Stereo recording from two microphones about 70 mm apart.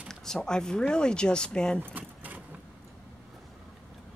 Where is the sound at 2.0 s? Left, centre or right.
Right.